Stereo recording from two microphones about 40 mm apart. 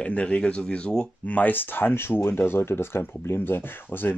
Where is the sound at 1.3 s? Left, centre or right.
Left.